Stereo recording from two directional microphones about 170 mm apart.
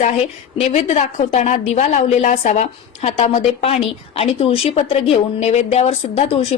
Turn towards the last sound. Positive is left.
turn(degrees=35)  # may be behind; listen again after turning